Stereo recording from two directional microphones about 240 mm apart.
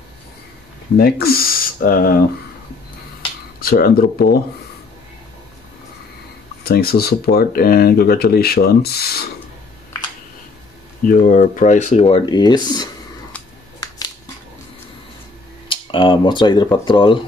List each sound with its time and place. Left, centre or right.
0.9 s speech: left
3.5 s speech: left
6.6 s speech: left
11.1 s speech: left
12.3 s speech: centre
13.3 s scissors: centre
15.7 s speech: left